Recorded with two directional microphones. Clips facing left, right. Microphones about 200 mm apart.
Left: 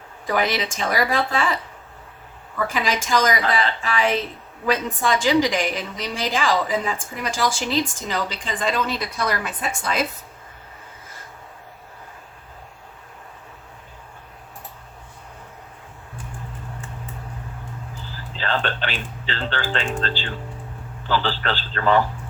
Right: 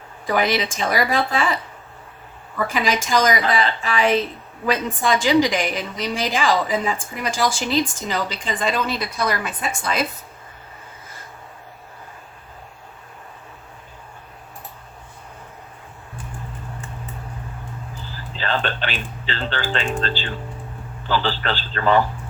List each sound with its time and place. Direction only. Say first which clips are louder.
0.3 s a woman's voice: right 2 dB; 15° right (ahead or behind)
2.7 s a woman's voice: right 2 dB; 15° right (ahead or behind); by 10.1 s centre (ahead or behind)
18.3 s music: right 1 dB; 15° right (ahead or behind)
21.1 s a woman's voice: right 1 dB; 15° right (ahead or behind)